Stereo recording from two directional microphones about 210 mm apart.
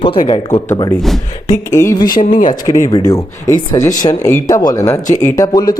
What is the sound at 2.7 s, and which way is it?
Speech, 30° left (ahead or behind).